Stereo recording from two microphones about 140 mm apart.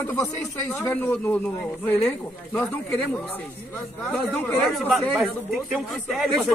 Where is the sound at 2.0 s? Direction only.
20° left (ahead or behind).